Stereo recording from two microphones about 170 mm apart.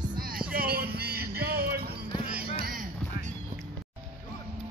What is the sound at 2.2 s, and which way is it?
Music, 60° right (ahead or behind).